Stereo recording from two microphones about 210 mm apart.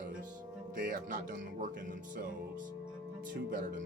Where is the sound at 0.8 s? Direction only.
40° right (ahead or behind).